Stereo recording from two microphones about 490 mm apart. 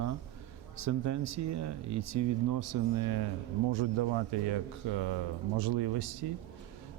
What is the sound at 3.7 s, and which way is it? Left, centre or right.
A man's voice, right.